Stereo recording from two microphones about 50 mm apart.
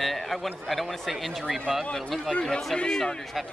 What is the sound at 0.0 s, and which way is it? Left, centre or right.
A man's voice, centre.